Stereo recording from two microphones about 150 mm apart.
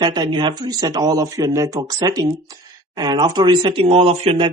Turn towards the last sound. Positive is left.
turn(degrees=-40)  # may be behind; listen again after turning